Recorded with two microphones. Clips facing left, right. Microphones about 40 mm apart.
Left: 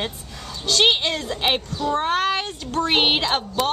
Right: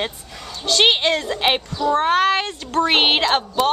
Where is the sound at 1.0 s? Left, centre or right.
Right.